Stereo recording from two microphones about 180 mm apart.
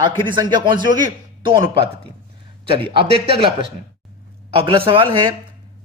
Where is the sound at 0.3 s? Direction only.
25° right (ahead or behind).